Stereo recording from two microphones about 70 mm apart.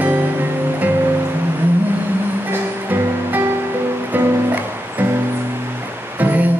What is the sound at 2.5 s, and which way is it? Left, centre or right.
Music, right.